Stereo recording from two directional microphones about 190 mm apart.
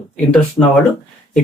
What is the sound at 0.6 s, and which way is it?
Speech, 25° left (ahead or behind).